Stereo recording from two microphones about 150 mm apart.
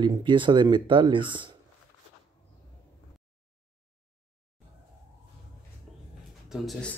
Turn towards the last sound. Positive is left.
turn(degrees=5)  # may be behind; listen again after turning